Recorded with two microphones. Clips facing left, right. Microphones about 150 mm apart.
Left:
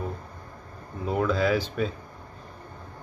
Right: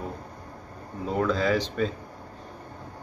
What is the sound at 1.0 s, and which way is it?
Speech, 5° left (ahead or behind).